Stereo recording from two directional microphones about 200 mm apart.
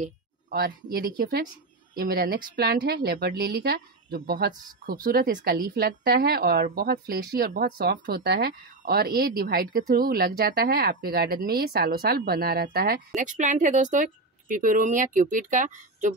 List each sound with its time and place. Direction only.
0.0 s speech: 50° right (ahead or behind)